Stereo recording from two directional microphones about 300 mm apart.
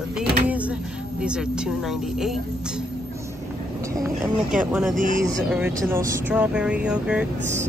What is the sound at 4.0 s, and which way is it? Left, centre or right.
Speech, centre.